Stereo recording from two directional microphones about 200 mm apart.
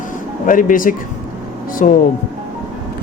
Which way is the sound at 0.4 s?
40° left (ahead or behind).